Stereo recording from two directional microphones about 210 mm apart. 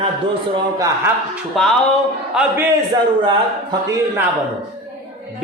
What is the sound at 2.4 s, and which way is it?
Speech, 10° right (ahead or behind).